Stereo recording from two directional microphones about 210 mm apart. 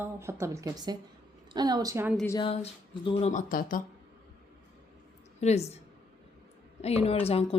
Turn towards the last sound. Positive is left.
turn(degrees=30)  # may be behind; listen again after turning